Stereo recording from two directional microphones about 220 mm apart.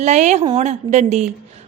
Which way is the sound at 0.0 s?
30° right (ahead or behind).